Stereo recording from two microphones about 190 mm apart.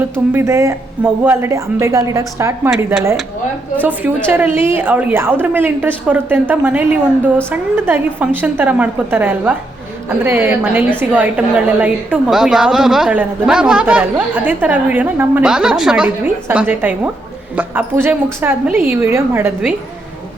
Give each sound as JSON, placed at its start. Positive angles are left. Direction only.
{"t": 0.3, "sound": "a woman's voice", "side_deg": -15}
{"t": 2.6, "sound": "speech", "side_deg": -5}
{"t": 4.3, "sound": "a woman's voice", "side_deg": -10}